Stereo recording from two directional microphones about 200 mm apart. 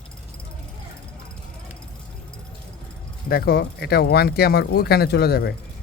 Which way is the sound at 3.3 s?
50° left (ahead or behind).